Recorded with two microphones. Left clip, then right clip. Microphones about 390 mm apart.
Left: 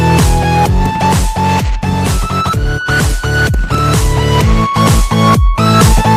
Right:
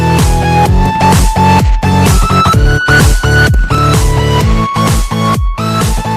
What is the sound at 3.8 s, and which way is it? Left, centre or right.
Music, right.